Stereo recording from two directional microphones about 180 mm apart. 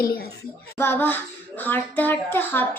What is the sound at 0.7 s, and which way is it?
A child's voice, 15° left (ahead or behind).